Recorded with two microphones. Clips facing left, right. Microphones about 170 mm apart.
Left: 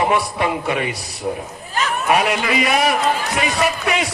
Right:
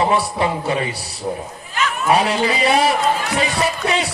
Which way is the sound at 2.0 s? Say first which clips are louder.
Right 2 dB; 35° right (ahead or behind).